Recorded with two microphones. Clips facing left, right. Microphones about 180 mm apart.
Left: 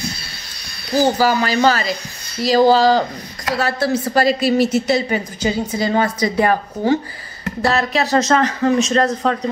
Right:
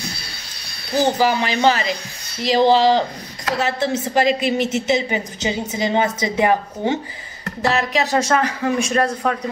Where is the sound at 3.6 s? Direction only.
20° right (ahead or behind).